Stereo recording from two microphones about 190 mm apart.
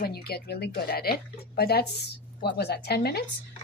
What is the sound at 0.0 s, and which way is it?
Speech, 55° left (ahead or behind).